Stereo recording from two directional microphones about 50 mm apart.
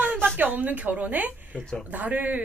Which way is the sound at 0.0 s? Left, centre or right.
Right.